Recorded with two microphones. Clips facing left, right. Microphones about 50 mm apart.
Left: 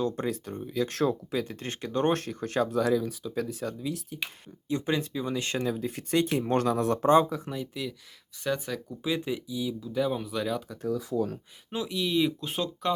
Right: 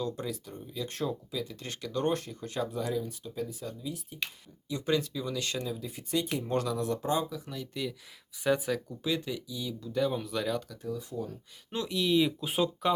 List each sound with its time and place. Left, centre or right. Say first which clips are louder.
0.0 s speech: left 5 dB; left
0.8 s speech: left 7 dB; left
2.1 s speech: left 6 dB; left
4.9 s speech: right 1 dB; left
5.6 s speech: left 7 dB; left
7.7 s speech: even; centre
9.0 s speech: left 2 dB; centre
10.8 s speech: left 7 dB; left
11.7 s speech: right 1 dB; centre